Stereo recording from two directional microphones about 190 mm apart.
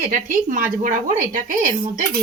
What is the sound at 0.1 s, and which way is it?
A woman's voice, 45° right (ahead or behind).